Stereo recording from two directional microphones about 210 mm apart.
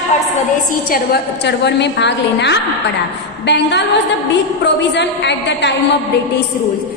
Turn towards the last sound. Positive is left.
turn(degrees=55)  # may be behind; listen again after turning